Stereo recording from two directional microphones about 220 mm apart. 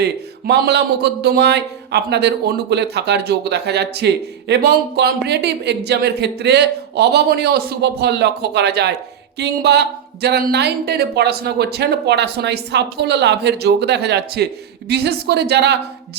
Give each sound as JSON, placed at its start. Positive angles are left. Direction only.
{"t": 0.0, "sound": "speech", "side_deg": -45}